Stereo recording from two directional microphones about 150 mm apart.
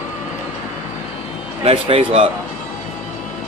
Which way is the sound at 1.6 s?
35° right (ahead or behind).